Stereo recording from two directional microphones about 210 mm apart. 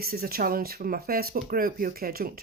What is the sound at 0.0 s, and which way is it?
Speech, 45° right (ahead or behind).